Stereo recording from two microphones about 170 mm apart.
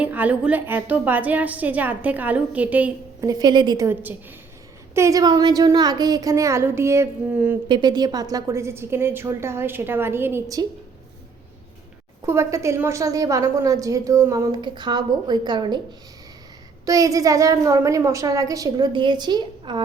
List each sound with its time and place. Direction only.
0.0 s a woman's voice: 10° right (ahead or behind)
3.2 s a woman's voice: 25° right (ahead or behind)
3.8 s a woman's voice: 10° right (ahead or behind)
7.7 s a woman's voice: 25° right (ahead or behind)
12.2 s a woman's voice: 15° right (ahead or behind)
16.8 s a woman's voice: 20° right (ahead or behind)